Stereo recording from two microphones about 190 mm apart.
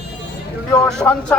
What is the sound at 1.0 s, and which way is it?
Speech, 10° left (ahead or behind).